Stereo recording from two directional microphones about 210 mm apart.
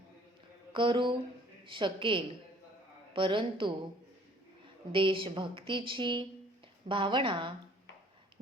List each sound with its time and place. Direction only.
0.7 s mantra: 25° right (ahead or behind)
1.7 s a woman's voice: 25° right (ahead or behind)
4.9 s a woman's voice: 25° right (ahead or behind)